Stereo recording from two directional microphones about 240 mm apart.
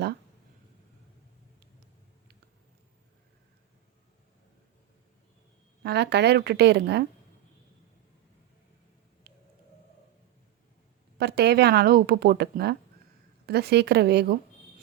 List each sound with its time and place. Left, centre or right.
5.8 s a woman's voice: right
11.2 s a woman's voice: right